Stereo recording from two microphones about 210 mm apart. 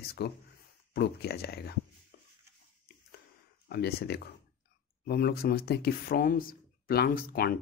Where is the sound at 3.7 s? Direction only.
50° left (ahead or behind).